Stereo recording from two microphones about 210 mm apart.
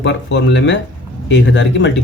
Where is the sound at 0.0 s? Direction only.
60° left (ahead or behind).